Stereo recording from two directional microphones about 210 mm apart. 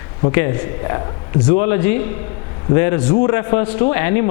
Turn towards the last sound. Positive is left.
turn(degrees=10)  # may be behind; listen again after turning